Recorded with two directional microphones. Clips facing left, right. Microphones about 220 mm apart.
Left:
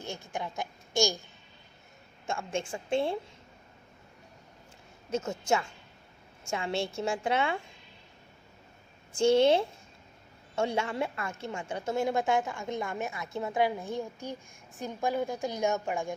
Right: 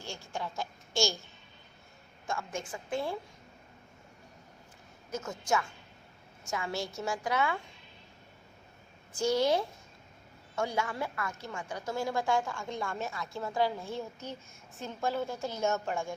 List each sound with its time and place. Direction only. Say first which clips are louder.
0.0 s a woman's voice: left 2 dB; 20° left (ahead or behind)
2.2 s a woman's voice: left 4 dB; 25° left (ahead or behind)
5.1 s a woman's voice: left 3 dB; 25° left (ahead or behind)
9.1 s a woman's voice: left 5 dB; 25° left (ahead or behind)